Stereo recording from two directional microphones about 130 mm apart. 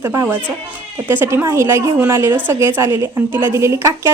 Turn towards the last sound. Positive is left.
turn(degrees=-20)  # may be behind; listen again after turning